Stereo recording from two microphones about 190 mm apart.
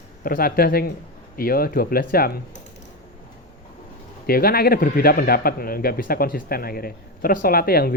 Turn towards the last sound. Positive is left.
turn(degrees=55)  # may be behind; listen again after turning